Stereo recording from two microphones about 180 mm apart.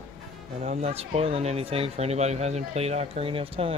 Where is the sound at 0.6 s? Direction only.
35° right (ahead or behind).